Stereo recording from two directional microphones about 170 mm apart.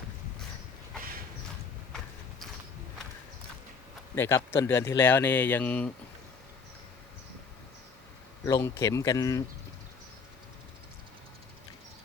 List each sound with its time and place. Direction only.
4.1 s speech: 15° left (ahead or behind)
8.4 s speech: 15° left (ahead or behind)